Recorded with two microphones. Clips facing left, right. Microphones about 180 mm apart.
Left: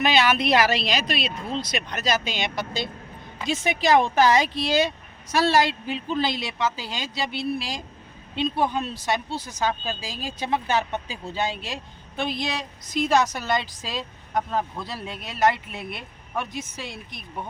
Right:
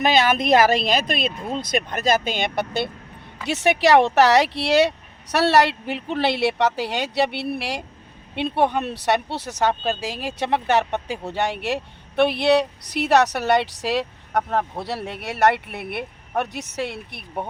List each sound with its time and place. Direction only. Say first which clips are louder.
0.0 s speech: right 2 dB; 45° right (ahead or behind)
3.4 s speech: right 5 dB; 70° right (ahead or behind)